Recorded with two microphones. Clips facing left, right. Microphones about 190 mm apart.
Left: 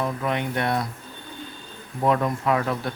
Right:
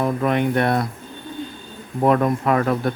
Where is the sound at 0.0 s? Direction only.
55° right (ahead or behind).